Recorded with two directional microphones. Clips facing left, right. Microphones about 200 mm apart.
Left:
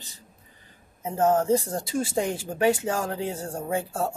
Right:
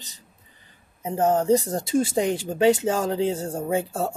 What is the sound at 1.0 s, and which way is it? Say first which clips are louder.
Speech: right 2 dB; 15° right (ahead or behind).